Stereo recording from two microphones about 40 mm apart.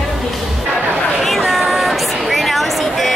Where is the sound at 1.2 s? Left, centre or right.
Centre.